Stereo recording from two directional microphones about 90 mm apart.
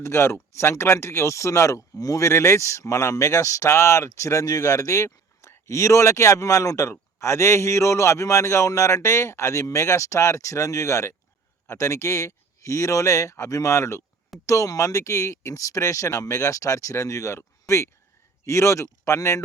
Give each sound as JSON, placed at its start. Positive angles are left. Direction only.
{"t": 0.0, "sound": "speech", "side_deg": 30}